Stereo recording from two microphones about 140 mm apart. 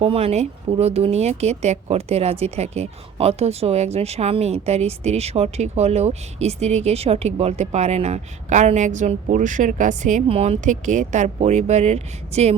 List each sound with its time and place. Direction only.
0.0 s speech: 45° right (ahead or behind)
10.2 s speech: 45° right (ahead or behind)